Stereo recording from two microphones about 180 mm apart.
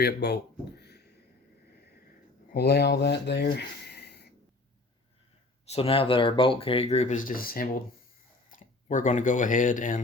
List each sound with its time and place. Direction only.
0.0 s speech: 65° left (ahead or behind)
0.8 s a sound: 65° left (ahead or behind)
2.5 s speech: 60° left (ahead or behind)
5.6 s speech: 35° left (ahead or behind)